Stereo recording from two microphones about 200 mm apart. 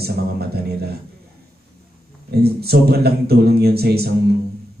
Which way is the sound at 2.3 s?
50° right (ahead or behind).